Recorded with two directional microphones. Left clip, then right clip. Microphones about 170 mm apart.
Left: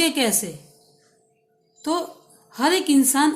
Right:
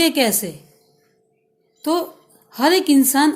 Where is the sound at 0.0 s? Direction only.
35° right (ahead or behind).